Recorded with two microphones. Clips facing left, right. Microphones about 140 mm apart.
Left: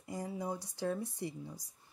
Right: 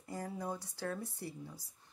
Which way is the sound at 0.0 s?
15° left (ahead or behind).